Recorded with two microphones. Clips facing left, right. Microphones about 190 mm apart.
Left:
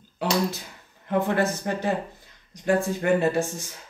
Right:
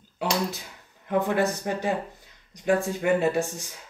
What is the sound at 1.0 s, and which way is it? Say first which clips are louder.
Speech: even; 15° right (ahead or behind).